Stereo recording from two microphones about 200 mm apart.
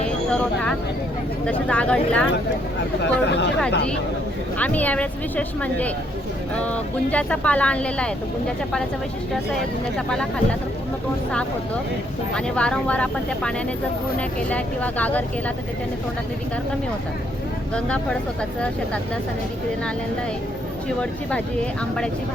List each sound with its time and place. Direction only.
0.3 s speech: 5° left (ahead or behind)
3.0 s speech: 60° left (ahead or behind)
4.5 s speech: 10° left (ahead or behind)
11.3 s speech: 5° left (ahead or behind)
17.7 s speech: 5° left (ahead or behind)
21.0 s speech: 5° left (ahead or behind)